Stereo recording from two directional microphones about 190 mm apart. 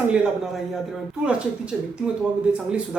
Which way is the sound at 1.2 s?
5° right (ahead or behind).